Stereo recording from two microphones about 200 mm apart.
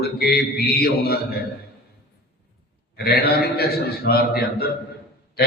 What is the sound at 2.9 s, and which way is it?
A man's voice, 50° left (ahead or behind).